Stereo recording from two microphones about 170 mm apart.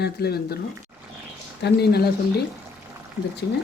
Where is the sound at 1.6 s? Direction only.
70° left (ahead or behind).